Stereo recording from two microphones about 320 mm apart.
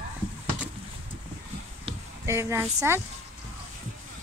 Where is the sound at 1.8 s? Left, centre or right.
Centre.